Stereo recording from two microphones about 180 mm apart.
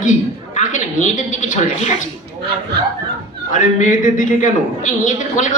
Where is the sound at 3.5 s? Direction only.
45° left (ahead or behind).